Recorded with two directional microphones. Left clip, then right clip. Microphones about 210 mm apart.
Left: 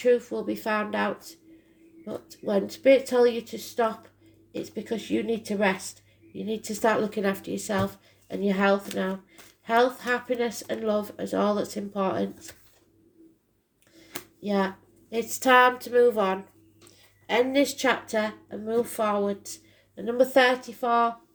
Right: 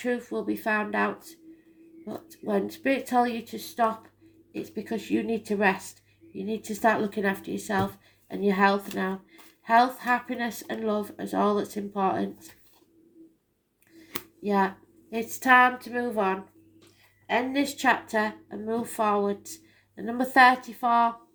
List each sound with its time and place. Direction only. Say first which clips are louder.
0.0 s a woman's voice: left 6 dB; 30° left (ahead or behind)
14.4 s a woman's voice: right 2 dB; 30° left (ahead or behind)